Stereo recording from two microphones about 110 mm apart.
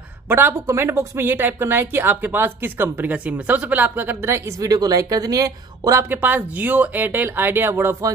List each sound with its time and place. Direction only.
0.3 s speech: 20° right (ahead or behind)